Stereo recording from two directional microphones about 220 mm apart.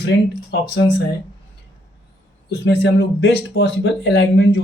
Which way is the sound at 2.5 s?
50° left (ahead or behind).